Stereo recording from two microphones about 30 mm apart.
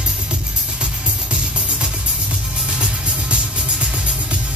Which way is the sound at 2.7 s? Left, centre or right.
Right.